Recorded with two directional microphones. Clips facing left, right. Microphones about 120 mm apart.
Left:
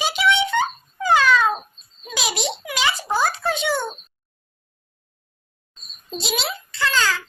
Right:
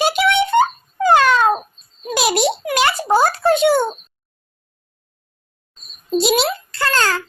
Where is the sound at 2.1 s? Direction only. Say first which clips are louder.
Right 9 dB; 55° right (ahead or behind).